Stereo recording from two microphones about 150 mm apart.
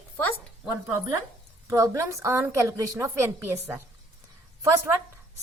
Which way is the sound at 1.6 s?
20° right (ahead or behind).